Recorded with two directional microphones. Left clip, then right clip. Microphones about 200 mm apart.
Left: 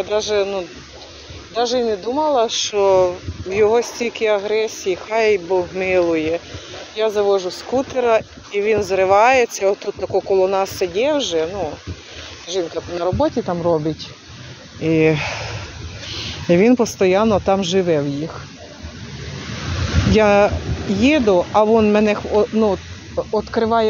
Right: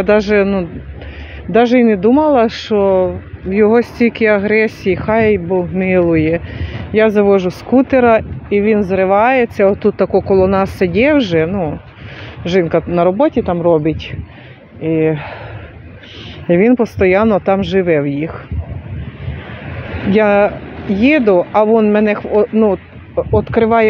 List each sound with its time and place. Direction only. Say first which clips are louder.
0.1 s speech: right 8 dB; 30° right (ahead or behind)
1.8 s speech: right 8 dB; 30° right (ahead or behind)
2.7 s speech: right 1 dB; 5° right (ahead or behind)
4.2 s speech: right 5 dB; 25° right (ahead or behind)
4.8 s speech: right 4 dB; 15° right (ahead or behind)
7.0 s speech: right 6 dB; 25° right (ahead or behind)
7.9 s speech: right 6 dB; 15° right (ahead or behind); by 13.9 s 35° right (ahead or behind)
14.8 s speech: right 1 dB; 5° right (ahead or behind)
16.4 s speech: right 3 dB; 10° right (ahead or behind)
20.1 s speech: right 2 dB; 10° right (ahead or behind)
22.3 s speech: right 6 dB; 25° right (ahead or behind)